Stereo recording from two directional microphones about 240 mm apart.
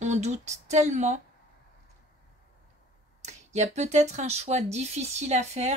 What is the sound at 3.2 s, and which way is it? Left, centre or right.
Speech, right.